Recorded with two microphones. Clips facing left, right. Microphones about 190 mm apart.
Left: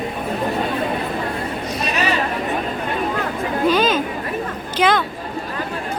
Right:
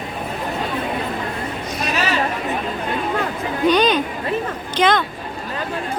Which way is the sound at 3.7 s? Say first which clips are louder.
Right 2 dB; 5° left (ahead or behind).